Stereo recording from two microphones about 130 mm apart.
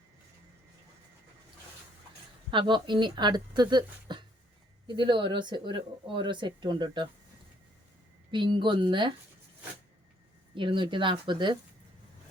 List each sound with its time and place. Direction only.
2.5 s speech: 40° right (ahead or behind)
8.3 s speech: 40° right (ahead or behind)
10.5 s speech: 40° right (ahead or behind)